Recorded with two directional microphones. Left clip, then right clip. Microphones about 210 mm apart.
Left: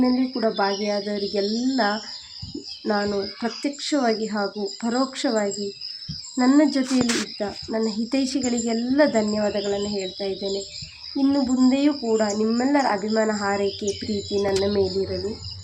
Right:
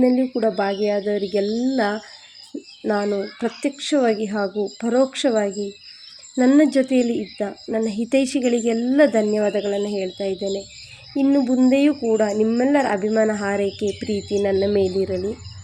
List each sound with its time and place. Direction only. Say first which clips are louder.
0.0 s speech: right 4 dB; 35° right (ahead or behind)